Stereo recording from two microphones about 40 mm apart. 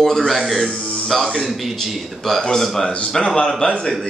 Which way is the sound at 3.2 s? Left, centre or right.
Left.